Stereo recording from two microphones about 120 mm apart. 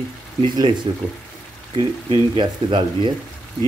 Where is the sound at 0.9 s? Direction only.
40° right (ahead or behind).